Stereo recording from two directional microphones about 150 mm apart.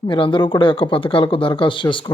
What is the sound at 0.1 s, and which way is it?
Speech, 35° left (ahead or behind).